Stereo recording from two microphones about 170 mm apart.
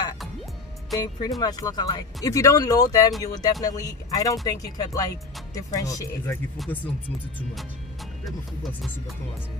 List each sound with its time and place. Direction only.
0.9 s speech: 25° left (ahead or behind)
6.6 s speech: centre (ahead or behind)